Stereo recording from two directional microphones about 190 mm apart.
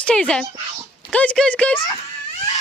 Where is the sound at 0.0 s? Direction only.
5° left (ahead or behind).